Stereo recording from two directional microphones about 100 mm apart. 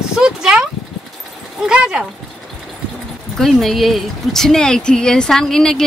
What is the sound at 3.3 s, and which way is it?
A woman's voice, centre (ahead or behind).